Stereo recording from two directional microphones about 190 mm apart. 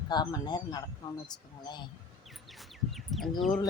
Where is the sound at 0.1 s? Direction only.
20° left (ahead or behind).